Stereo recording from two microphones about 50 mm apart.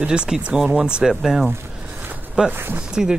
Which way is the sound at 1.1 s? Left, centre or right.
Centre.